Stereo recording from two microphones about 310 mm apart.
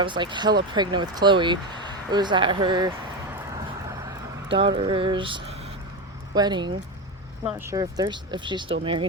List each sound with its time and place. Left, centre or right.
0.0 s speech: centre
4.4 s speech: centre